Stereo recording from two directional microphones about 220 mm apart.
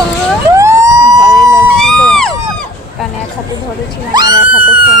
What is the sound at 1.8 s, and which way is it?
Music, 5° left (ahead or behind).